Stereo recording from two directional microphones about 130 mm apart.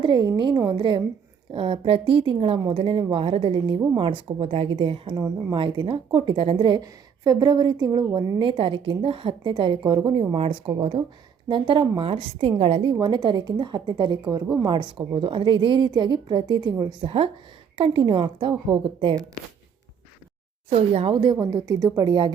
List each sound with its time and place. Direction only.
0.0 s a woman's voice: 35° right (ahead or behind)
8.4 s a woman's voice: 40° right (ahead or behind)
10.3 s a woman's voice: 50° right (ahead or behind)
12.9 s a woman's voice: 35° right (ahead or behind)
20.7 s a woman's voice: 50° right (ahead or behind)
21.4 s a woman's voice: 30° right (ahead or behind)